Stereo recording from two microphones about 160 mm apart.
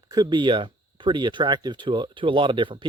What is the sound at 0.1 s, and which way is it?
Speech, 25° right (ahead or behind).